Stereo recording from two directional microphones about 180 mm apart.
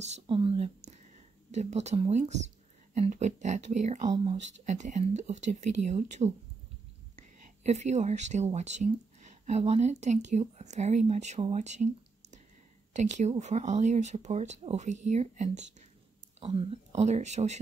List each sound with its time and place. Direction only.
0.0 s speech: 35° right (ahead or behind)